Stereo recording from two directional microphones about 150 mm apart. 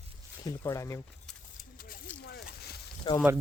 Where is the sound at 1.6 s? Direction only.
70° left (ahead or behind).